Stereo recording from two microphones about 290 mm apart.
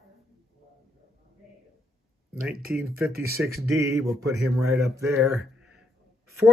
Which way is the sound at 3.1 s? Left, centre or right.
Right.